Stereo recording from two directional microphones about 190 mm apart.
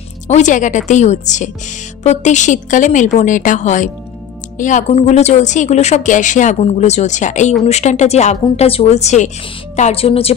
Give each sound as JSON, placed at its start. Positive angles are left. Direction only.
{"t": 0.3, "sound": "speech", "side_deg": 40}